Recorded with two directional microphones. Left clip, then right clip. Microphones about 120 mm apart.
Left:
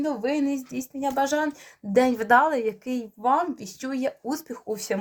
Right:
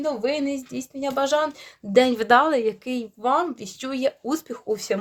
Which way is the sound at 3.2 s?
65° right (ahead or behind).